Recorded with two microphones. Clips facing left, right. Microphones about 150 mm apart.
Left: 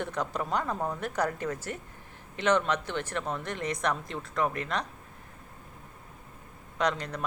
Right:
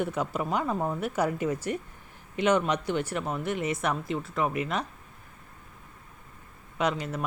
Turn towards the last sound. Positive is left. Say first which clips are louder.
# right 1 dB
turn(degrees=-5)  # may be behind; listen again after turning